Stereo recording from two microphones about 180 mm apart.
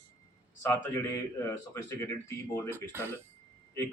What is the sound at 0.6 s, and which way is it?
Speech, 15° left (ahead or behind).